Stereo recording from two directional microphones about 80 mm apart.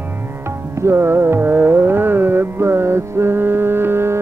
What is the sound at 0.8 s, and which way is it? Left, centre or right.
Music, right.